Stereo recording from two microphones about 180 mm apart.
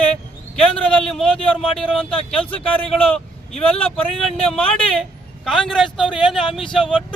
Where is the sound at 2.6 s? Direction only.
5° left (ahead or behind).